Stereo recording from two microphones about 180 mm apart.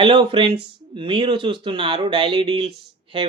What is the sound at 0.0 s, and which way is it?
Speech, 25° right (ahead or behind).